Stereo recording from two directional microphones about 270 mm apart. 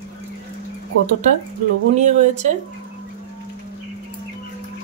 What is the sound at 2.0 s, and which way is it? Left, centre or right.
Speech, right.